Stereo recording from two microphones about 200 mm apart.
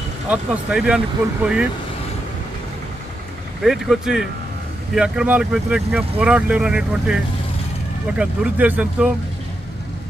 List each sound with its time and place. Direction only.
0.3 s speech: 5° right (ahead or behind)
3.6 s speech: centre (ahead or behind)
8.2 s speech: 10° right (ahead or behind)